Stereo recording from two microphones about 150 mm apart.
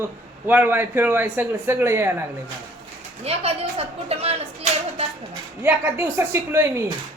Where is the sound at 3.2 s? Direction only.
40° right (ahead or behind).